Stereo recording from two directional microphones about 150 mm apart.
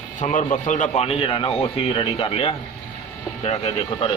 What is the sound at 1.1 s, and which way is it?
A man's voice, 35° left (ahead or behind).